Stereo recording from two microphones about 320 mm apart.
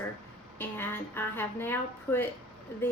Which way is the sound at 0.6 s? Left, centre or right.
Centre.